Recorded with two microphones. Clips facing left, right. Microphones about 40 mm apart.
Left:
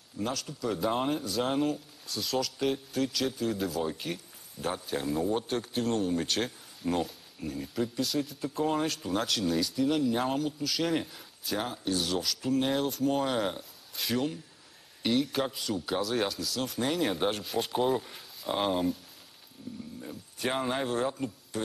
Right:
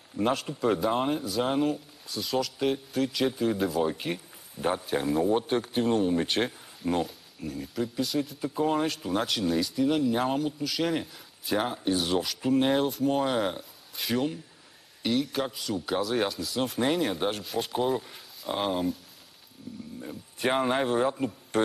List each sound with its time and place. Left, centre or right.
0.2 s speech: right
0.7 s speech: centre
3.2 s speech: centre
6.8 s speech: centre
11.4 s speech: right
12.8 s speech: centre
17.0 s speech: centre
19.7 s a sound: centre
20.0 s speech: centre
21.5 s speech: right